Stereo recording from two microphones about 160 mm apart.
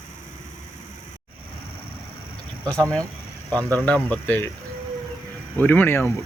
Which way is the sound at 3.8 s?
10° left (ahead or behind).